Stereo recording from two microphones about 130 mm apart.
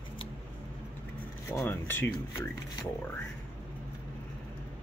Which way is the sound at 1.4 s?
20° left (ahead or behind).